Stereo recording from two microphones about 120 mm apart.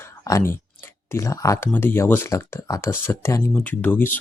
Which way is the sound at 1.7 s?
15° left (ahead or behind).